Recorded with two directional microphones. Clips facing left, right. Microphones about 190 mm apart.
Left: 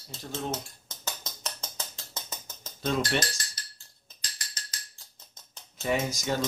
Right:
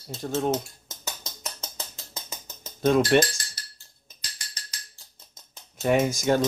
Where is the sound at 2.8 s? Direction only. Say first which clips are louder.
Right 9 dB; 55° right (ahead or behind).